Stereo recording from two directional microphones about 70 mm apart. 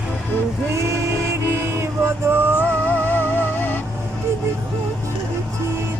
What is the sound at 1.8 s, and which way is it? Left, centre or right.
Music, right.